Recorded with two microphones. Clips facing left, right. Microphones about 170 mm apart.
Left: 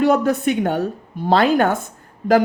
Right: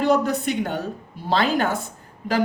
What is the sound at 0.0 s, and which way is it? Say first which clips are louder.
A woman's voice: left 4 dB; 50° left (ahead or behind).